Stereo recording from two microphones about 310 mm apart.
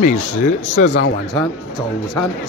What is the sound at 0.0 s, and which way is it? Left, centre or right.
Speech, left.